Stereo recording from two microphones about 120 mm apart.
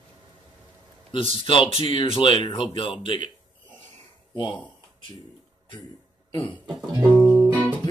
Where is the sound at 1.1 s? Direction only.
50° left (ahead or behind).